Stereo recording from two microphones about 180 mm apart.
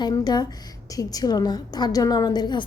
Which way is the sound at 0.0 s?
25° left (ahead or behind).